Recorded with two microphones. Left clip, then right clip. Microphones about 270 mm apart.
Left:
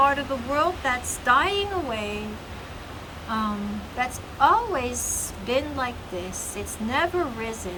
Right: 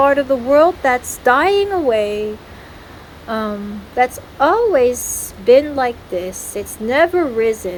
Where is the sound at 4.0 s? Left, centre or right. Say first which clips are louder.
Right 7 dB; centre.